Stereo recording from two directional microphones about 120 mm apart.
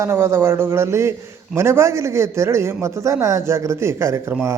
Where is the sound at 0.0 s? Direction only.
20° right (ahead or behind).